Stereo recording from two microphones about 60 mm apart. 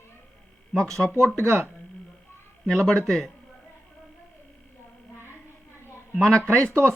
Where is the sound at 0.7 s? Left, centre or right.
Centre.